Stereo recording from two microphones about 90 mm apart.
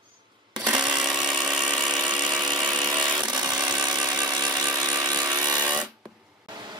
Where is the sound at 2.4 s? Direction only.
55° right (ahead or behind).